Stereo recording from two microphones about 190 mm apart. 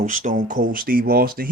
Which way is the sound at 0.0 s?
45° right (ahead or behind).